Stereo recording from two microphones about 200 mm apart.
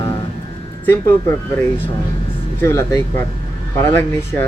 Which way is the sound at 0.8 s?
10° left (ahead or behind).